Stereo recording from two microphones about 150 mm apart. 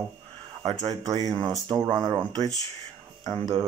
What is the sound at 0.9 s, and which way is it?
Speech, 25° right (ahead or behind).